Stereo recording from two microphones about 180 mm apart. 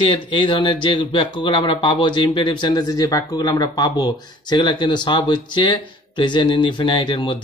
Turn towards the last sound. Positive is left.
turn(degrees=25)  # may be behind; listen again after turning